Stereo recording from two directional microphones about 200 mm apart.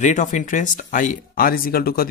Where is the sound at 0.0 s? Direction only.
40° left (ahead or behind).